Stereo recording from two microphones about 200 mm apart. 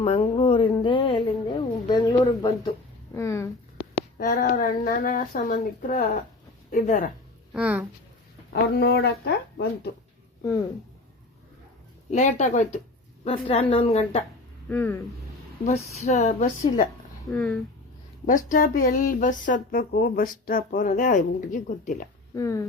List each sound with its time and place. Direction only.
0.0 s a woman's voice: 30° left (ahead or behind)
4.2 s speech: 50° left (ahead or behind)
7.5 s speech: 5° right (ahead or behind)
8.7 s speech: 55° left (ahead or behind)
12.1 s a woman's voice: 35° left (ahead or behind)
14.7 s speech: 10° left (ahead or behind)
15.6 s speech: 35° left (ahead or behind)
17.3 s speech: 5° left (ahead or behind)
18.3 s speech: 40° left (ahead or behind)
22.4 s speech: 15° left (ahead or behind)